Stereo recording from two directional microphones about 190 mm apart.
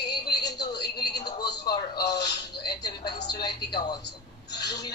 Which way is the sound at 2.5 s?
60° left (ahead or behind).